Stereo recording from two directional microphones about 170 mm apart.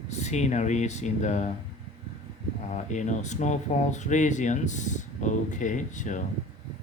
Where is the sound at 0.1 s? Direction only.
40° left (ahead or behind).